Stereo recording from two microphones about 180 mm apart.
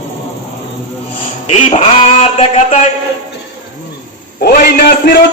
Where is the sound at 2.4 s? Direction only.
40° left (ahead or behind).